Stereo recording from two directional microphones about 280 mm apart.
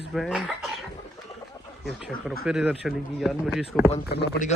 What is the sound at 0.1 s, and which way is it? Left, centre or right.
Speech, centre.